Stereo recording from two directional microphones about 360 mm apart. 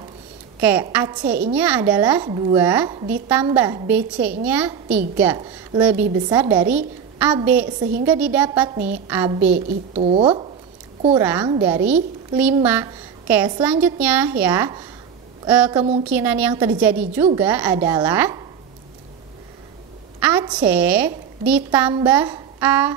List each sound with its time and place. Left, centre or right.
0.6 s a woman's voice: centre
7.6 s a woman's voice: right
8.0 s a woman's voice: centre
9.7 s a woman's voice: centre
11.2 s a woman's voice: centre
20.2 s a woman's voice: centre